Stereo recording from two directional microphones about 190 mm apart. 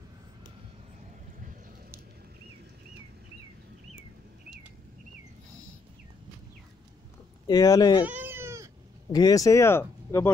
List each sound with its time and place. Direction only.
7.4 s speech: 20° left (ahead or behind)
8.0 s goat: 10° right (ahead or behind)
9.1 s speech: 20° left (ahead or behind)